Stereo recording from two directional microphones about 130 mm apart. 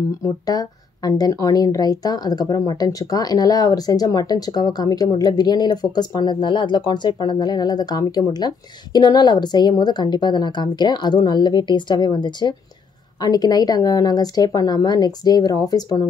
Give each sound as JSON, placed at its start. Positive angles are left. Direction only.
{"t": 0.2, "sound": "speech", "side_deg": 30}